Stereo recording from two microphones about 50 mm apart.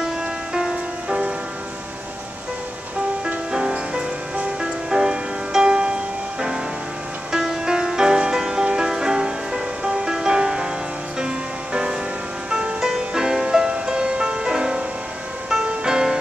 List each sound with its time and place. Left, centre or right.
0.0 s music: centre
3.3 s music: centre
7.3 s music: centre